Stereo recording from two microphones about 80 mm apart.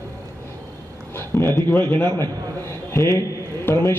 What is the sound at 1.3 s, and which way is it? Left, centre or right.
Speech, left.